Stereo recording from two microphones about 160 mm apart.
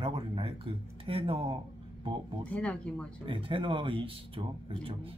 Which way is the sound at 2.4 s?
5° left (ahead or behind).